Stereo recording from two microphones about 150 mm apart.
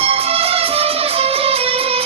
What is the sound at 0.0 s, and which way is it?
Music, 40° right (ahead or behind).